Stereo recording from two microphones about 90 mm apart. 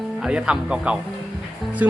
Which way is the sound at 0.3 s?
10° right (ahead or behind).